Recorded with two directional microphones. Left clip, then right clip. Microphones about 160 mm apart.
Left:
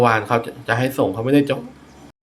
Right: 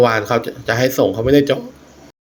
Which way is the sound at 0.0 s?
15° right (ahead or behind).